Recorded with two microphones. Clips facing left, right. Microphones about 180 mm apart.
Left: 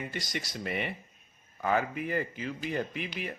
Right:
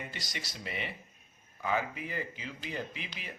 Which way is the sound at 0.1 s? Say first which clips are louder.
Left 7 dB; 50° left (ahead or behind).